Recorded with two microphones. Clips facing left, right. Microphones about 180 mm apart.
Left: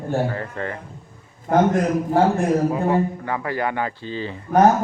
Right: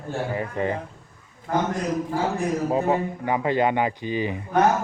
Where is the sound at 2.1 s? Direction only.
55° left (ahead or behind).